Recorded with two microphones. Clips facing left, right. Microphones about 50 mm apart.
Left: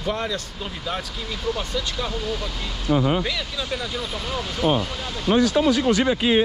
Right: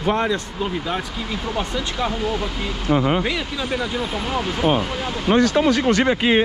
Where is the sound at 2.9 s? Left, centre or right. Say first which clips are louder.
Right 2 dB; right.